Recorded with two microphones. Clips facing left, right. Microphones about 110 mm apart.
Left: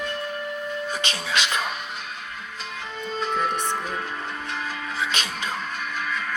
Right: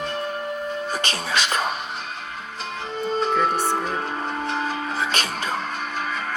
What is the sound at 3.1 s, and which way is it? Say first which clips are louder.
Music: right 4 dB; 40° right (ahead or behind).